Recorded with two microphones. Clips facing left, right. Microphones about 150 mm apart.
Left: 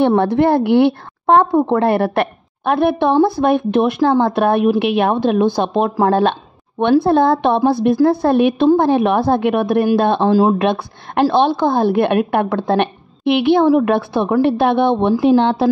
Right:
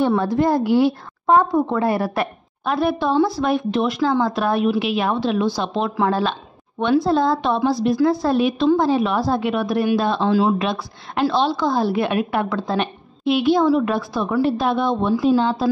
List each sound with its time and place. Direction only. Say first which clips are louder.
0.0 s speech: left 5 dB; 65° left (ahead or behind)